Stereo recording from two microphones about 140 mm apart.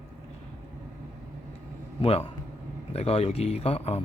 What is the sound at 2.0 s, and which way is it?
Speech, 45° left (ahead or behind).